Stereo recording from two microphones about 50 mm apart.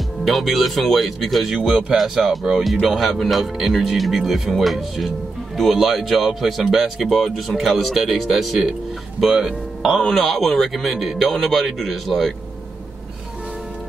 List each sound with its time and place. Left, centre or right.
0.2 s speech: centre
9.8 s speech: centre